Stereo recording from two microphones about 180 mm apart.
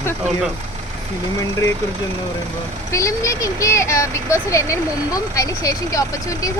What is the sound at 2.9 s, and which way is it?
Speech, 15° left (ahead or behind).